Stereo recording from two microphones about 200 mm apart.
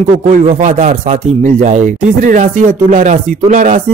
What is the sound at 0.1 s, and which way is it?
Speech, 35° right (ahead or behind).